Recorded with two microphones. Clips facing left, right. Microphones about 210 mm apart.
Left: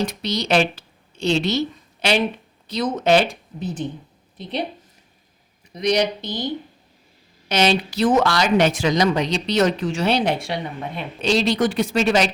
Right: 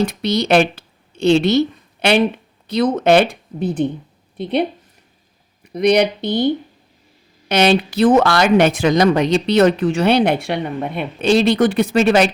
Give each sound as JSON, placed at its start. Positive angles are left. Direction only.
{"t": 0.0, "sound": "speech", "side_deg": -55}
{"t": 5.6, "sound": "speech", "side_deg": -60}